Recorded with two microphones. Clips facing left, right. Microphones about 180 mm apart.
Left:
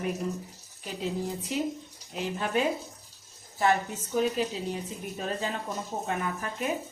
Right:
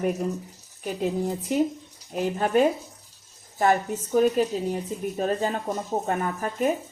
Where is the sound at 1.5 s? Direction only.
50° right (ahead or behind).